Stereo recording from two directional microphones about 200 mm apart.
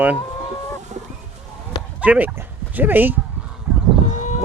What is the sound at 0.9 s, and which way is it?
Fowl, 35° right (ahead or behind).